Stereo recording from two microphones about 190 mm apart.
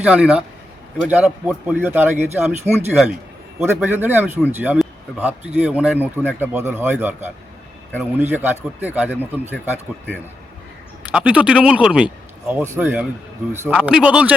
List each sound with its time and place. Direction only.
0.0 s a man's voice: 5° right (ahead or behind)
3.6 s a man's voice: 10° right (ahead or behind)
11.1 s a man's voice: 5° right (ahead or behind)